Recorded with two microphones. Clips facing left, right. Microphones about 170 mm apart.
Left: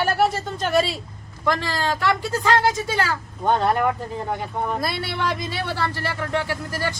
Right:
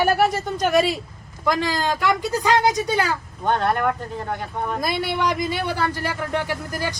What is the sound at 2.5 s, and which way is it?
Speech, 20° right (ahead or behind).